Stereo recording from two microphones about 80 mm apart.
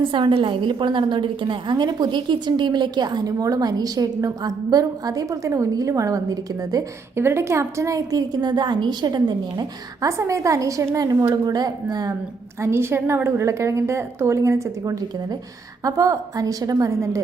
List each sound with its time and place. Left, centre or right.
0.0 s a woman's voice: right
7.2 s a woman's voice: right
10.1 s a woman's voice: right
12.5 s a woman's voice: right